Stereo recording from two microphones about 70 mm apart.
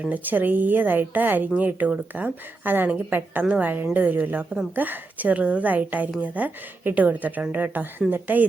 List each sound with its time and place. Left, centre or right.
0.0 s a woman's voice: right